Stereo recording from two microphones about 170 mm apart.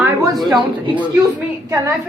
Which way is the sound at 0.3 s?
Centre (ahead or behind).